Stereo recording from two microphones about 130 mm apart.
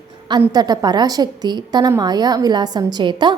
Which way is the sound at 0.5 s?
30° right (ahead or behind).